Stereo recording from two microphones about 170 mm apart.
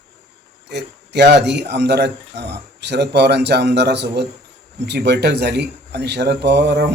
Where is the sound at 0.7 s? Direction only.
80° right.